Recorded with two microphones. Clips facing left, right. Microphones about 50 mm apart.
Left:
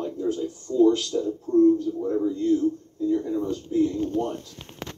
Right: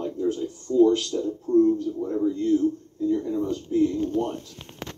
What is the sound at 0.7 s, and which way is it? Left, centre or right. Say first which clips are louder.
Speech: right 2 dB; right.